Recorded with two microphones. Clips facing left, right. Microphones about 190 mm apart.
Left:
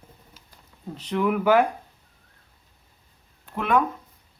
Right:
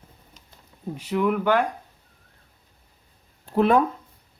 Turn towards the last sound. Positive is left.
turn(degrees=-35)  # may be behind; listen again after turning